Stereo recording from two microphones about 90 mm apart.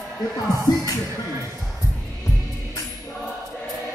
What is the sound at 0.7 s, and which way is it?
Music, 50° left (ahead or behind).